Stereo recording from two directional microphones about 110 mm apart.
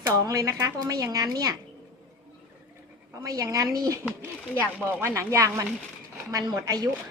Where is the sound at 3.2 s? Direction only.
35° right (ahead or behind).